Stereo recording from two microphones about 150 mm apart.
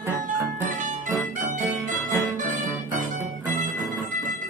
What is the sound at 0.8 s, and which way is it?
Music, 60° right (ahead or behind).